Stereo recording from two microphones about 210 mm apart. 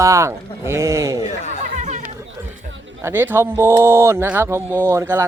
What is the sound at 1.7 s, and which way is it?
Chatter, 35° right (ahead or behind).